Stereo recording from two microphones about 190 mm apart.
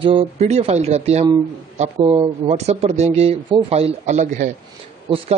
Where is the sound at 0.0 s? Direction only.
30° right (ahead or behind).